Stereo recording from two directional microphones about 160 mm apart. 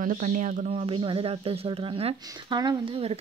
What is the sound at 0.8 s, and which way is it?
Speech, 35° right (ahead or behind).